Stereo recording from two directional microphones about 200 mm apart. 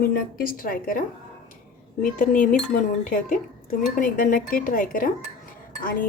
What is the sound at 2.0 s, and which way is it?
A woman's voice, 40° left (ahead or behind).